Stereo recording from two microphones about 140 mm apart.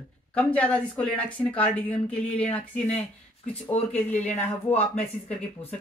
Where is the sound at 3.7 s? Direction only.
50° left (ahead or behind).